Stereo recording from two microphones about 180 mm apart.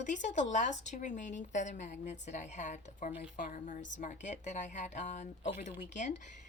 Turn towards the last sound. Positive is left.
turn(degrees=45)  # may be behind; listen again after turning